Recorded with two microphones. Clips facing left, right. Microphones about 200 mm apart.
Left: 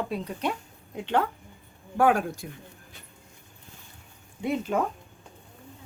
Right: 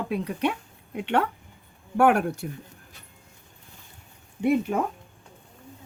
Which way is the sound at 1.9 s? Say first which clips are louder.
Right 2 dB; 65° right (ahead or behind).